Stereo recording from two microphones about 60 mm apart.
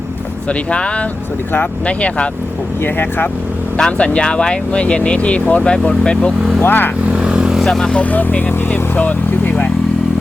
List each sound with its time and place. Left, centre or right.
0.4 s speech: centre
2.8 s speech: left
3.8 s speech: centre
6.6 s speech: left
7.1 s vehicle: centre
7.6 s speech: centre
8.0 s speech: left